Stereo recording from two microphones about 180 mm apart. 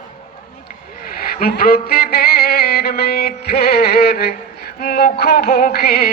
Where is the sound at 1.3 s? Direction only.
60° left (ahead or behind).